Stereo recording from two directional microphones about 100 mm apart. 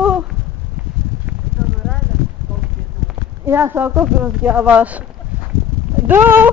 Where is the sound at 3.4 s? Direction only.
25° right (ahead or behind).